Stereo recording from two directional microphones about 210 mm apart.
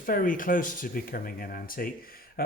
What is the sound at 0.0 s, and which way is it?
Speech, 40° left (ahead or behind).